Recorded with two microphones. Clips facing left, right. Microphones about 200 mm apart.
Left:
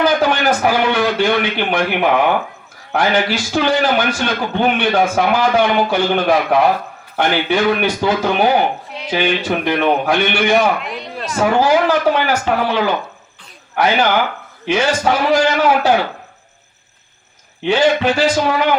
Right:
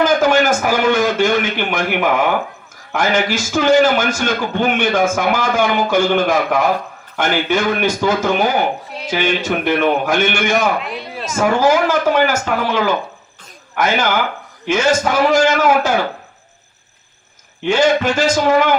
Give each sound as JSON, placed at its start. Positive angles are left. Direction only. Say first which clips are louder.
{"t": 0.0, "sound": "a sound", "louder": "right 2 dB", "side_deg": -45}
{"t": 2.9, "sound": "a man's voice", "louder": "left 1 dB", "side_deg": -45}
{"t": 10.8, "sound": "speech", "louder": "right 1 dB", "side_deg": 0}
{"t": 11.3, "sound": "a man's voice", "louder": "even", "side_deg": -45}
{"t": 17.7, "sound": "a man's voice", "louder": "even", "side_deg": -45}